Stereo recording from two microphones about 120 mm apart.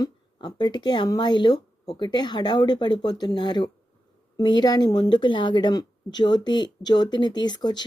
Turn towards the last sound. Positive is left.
turn(degrees=35)  # may be behind; listen again after turning